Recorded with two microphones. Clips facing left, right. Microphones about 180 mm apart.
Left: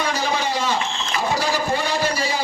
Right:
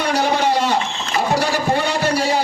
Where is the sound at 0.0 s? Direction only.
65° right (ahead or behind).